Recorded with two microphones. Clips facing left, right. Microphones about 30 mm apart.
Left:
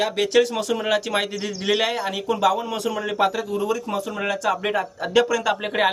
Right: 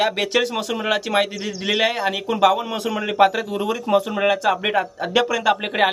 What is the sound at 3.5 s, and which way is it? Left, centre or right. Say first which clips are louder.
Speech: right 4 dB; right.